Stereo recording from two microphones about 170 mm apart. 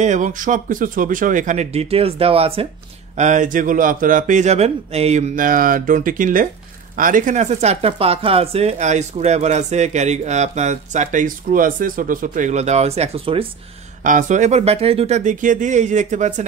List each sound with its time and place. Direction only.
0.0 s speech: 45° right (ahead or behind)
3.2 s speech: 45° right (ahead or behind)
5.3 s speech: 55° right (ahead or behind); by 13.5 s 35° right (ahead or behind)
14.0 s speech: 50° right (ahead or behind)